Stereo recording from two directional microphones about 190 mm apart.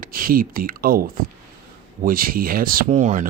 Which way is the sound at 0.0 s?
50° right (ahead or behind).